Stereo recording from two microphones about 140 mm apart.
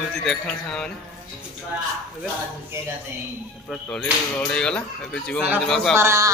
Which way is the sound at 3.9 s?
5° left (ahead or behind).